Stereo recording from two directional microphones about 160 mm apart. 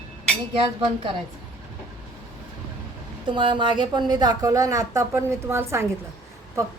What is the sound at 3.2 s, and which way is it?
A woman's voice, 30° right (ahead or behind).